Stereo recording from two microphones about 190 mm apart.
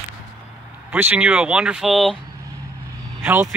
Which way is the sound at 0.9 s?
10° right (ahead or behind).